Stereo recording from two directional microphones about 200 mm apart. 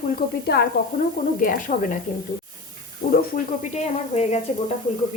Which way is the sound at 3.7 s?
35° left (ahead or behind).